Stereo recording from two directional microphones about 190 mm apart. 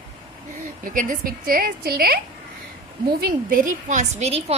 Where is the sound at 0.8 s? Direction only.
45° right (ahead or behind).